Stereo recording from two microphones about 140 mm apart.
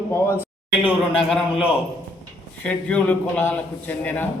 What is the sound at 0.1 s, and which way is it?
Speech, 15° left (ahead or behind).